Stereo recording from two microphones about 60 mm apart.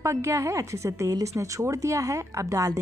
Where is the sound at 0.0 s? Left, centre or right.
Right.